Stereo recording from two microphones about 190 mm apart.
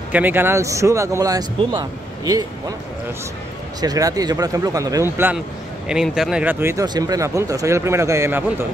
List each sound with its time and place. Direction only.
0.1 s speech: 10° right (ahead or behind)
3.8 s a man's voice: 20° right (ahead or behind)